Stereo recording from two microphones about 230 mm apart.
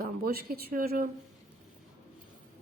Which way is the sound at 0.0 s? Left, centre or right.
Right.